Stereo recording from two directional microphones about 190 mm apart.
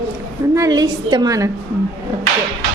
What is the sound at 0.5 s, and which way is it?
Speech, 20° right (ahead or behind).